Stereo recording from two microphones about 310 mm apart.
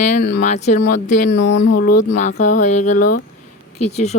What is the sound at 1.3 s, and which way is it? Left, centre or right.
Speech, left.